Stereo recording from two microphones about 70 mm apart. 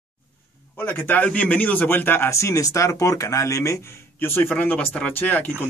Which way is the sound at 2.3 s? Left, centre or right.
Left.